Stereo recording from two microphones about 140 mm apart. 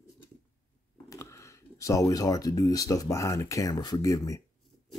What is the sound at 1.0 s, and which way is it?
Speech, 20° left (ahead or behind).